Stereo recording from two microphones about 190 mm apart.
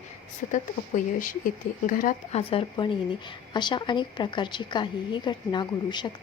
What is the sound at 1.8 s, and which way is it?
A woman's voice, 40° left (ahead or behind).